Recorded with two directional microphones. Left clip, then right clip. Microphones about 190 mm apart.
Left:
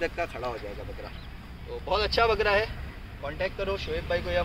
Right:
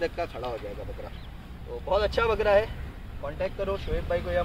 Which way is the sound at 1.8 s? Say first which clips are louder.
Even; 30° left (ahead or behind).